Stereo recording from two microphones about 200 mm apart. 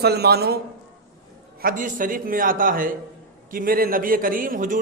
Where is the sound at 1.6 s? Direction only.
45° right (ahead or behind).